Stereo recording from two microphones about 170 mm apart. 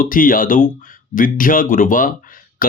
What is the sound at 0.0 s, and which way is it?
Speech, 55° left (ahead or behind).